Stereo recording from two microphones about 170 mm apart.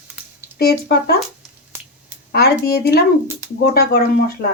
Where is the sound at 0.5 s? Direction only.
65° left (ahead or behind).